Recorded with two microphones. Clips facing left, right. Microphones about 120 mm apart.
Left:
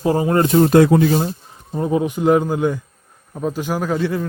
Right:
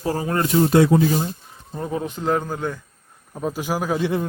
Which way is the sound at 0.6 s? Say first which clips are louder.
Left 2 dB; 55° left (ahead or behind).